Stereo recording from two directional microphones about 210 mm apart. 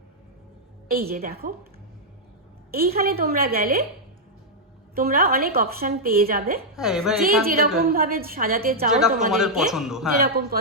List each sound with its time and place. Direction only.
0.9 s a woman's voice: 45° right (ahead or behind)
3.0 s a woman's voice: 45° right (ahead or behind)
4.9 s a woman's voice: 45° right (ahead or behind)
6.7 s a man's voice: centre (ahead or behind)
7.4 s a woman's voice: 45° right (ahead or behind)
8.9 s a man's voice: 5° right (ahead or behind)
10.2 s a woman's voice: 45° right (ahead or behind)